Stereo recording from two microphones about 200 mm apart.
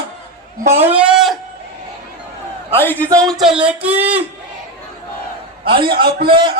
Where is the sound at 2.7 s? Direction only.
10° left (ahead or behind); by 4.2 s 10° right (ahead or behind).